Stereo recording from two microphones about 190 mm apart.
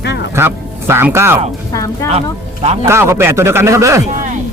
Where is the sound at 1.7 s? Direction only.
15° left (ahead or behind).